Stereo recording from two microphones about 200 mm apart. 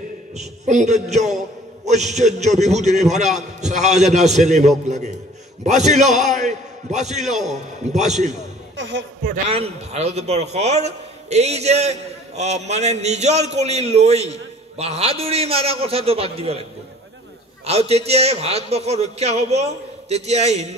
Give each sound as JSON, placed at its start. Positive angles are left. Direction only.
{"t": 0.4, "sound": "a man's voice", "side_deg": -35}
{"t": 8.7, "sound": "speech", "side_deg": -60}
{"t": 9.5, "sound": "a man's voice", "side_deg": -30}
{"t": 17.6, "sound": "a man's voice", "side_deg": -30}